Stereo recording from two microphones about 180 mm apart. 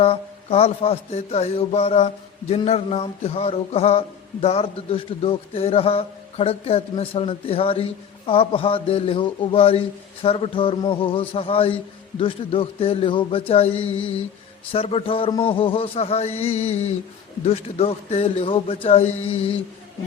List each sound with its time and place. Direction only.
0.0 s music: 35° left (ahead or behind)
10.2 s a sound: 30° left (ahead or behind)
12.2 s music: 30° left (ahead or behind)